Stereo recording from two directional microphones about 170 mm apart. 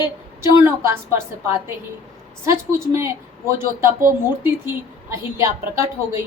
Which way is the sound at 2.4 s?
15° right (ahead or behind).